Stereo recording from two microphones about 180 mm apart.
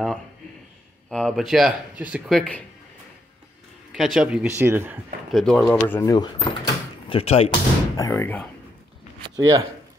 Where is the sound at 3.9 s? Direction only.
Centre (ahead or behind).